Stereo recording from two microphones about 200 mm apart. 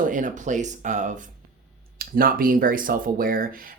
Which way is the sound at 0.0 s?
40° right (ahead or behind).